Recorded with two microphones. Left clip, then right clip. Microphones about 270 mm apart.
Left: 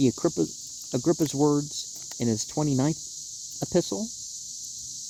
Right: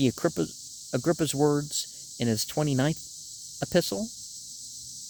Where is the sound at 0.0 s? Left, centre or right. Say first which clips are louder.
Left 2 dB; right.